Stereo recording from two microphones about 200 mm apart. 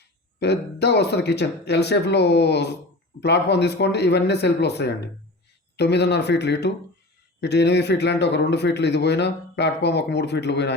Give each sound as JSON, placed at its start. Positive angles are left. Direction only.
{"t": 0.3, "sound": "speech", "side_deg": 55}